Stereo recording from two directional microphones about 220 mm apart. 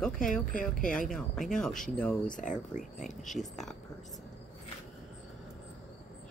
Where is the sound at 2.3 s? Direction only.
35° left (ahead or behind).